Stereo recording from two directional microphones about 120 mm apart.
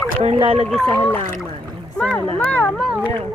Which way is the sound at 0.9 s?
20° left (ahead or behind).